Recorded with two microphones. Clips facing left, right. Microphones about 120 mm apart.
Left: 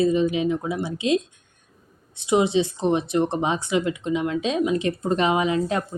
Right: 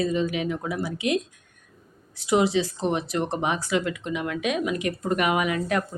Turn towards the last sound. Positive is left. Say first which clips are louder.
# left 2 dB
turn(degrees=25)  # may be behind; listen again after turning